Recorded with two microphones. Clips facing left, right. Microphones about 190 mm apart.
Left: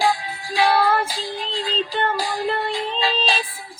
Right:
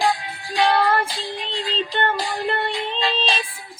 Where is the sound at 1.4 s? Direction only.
35° left (ahead or behind).